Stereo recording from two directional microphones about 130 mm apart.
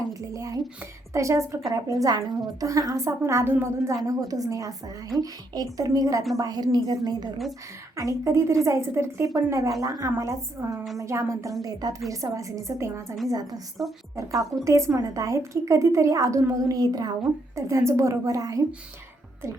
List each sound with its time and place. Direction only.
0.1 s a woman's voice: 25° right (ahead or behind)